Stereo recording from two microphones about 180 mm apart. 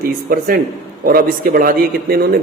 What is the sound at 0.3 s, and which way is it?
A man's voice, 55° right (ahead or behind).